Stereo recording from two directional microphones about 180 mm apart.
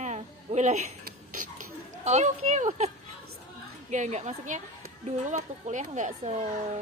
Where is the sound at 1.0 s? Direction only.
50° right (ahead or behind).